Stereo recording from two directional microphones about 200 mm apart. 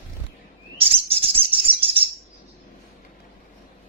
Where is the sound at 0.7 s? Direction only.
30° right (ahead or behind).